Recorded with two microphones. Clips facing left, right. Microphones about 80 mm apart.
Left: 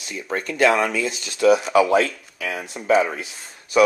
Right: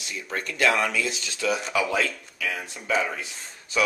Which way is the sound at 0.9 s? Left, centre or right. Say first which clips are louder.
Left 3 dB; left.